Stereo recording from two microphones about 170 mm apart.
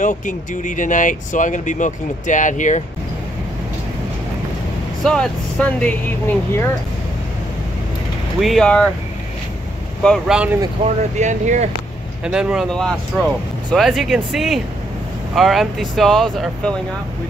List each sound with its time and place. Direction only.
0.0 s speech: 50° left (ahead or behind)
5.0 s speech: 5° left (ahead or behind)
8.4 s speech: centre (ahead or behind)
10.0 s speech: centre (ahead or behind)
10.8 s speech: 40° right (ahead or behind)
12.3 s speech: 5° right (ahead or behind)